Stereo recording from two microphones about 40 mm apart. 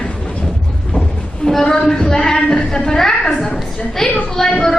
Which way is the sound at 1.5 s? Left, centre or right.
Centre.